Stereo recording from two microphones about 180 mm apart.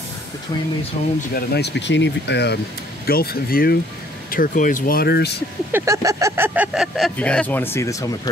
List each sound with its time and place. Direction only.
1.0 s speech: 35° left (ahead or behind)
1.3 s speech: 65° left (ahead or behind)
3.1 s speech: 55° left (ahead or behind)
5.7 s speech: 15° right (ahead or behind); by 8.1 s 15° left (ahead or behind)